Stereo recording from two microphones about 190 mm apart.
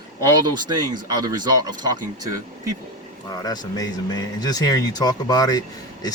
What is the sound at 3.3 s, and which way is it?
Speech, 20° left (ahead or behind).